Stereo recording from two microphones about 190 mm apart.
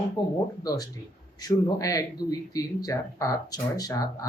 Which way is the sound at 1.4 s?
20° left (ahead or behind).